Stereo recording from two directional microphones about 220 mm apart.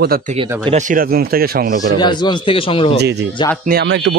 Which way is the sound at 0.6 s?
35° right (ahead or behind).